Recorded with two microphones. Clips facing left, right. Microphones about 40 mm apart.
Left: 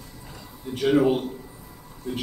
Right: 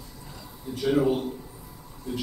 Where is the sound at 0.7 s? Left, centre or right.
Left.